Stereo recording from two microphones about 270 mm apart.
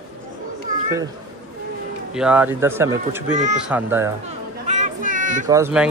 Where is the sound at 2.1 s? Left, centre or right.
Centre.